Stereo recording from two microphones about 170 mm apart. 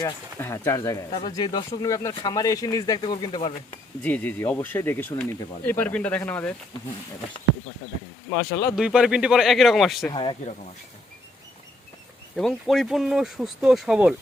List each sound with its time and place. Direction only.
0.0 s speech: 15° left (ahead or behind)
4.0 s speech: 10° left (ahead or behind)
8.7 s speech: 5° right (ahead or behind)
10.1 s speech: 30° left (ahead or behind)
12.4 s speech: centre (ahead or behind)